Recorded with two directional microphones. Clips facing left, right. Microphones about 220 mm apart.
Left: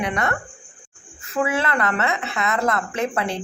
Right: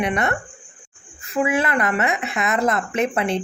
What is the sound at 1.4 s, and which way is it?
Speech, 15° right (ahead or behind).